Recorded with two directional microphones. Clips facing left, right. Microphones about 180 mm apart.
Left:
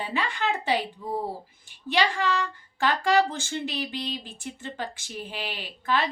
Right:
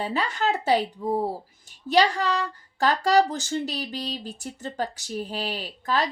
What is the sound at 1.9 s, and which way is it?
A woman's voice, 40° right (ahead or behind).